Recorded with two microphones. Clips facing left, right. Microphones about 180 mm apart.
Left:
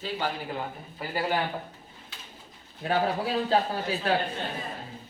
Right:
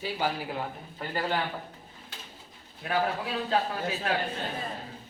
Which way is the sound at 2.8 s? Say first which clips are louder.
Left 3 dB; 30° left (ahead or behind).